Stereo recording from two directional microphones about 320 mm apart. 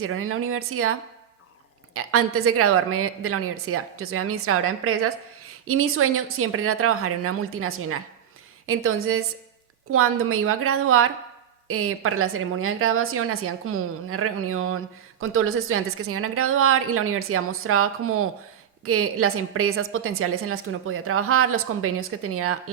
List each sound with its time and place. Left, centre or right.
0.0 s a woman's voice: right